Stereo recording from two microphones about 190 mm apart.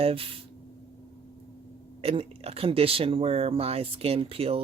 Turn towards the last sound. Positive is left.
turn(degrees=-30)  # may be behind; listen again after turning